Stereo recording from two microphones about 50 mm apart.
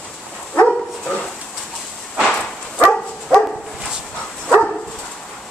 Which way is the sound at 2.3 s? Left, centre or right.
Centre.